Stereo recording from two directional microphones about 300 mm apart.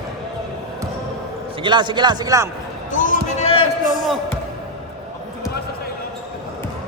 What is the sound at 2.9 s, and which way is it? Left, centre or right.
Basketball bounce, left.